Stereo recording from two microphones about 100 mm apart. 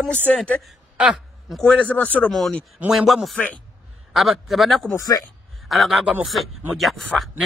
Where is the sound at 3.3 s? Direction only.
15° left (ahead or behind).